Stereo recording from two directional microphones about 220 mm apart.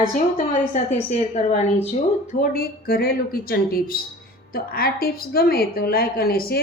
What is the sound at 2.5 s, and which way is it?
A woman's voice, 40° left (ahead or behind).